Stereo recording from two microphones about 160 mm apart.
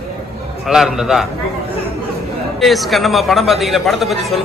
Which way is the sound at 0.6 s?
Centre (ahead or behind).